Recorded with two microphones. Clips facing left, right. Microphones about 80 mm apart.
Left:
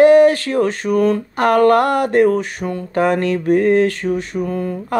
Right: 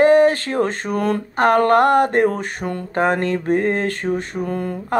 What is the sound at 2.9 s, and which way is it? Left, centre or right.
Speech, right.